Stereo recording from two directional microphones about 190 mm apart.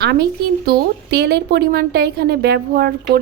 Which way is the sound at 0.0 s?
60° right (ahead or behind).